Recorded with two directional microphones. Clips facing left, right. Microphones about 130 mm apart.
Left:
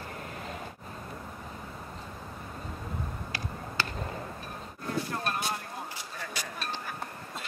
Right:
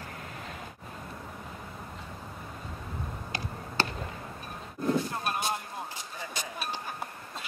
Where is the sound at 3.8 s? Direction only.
30° right (ahead or behind).